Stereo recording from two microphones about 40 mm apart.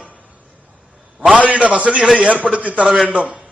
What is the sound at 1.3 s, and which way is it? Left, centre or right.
A man's voice, right.